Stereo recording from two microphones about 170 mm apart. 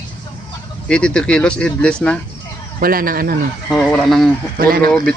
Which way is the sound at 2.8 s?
60° right (ahead or behind).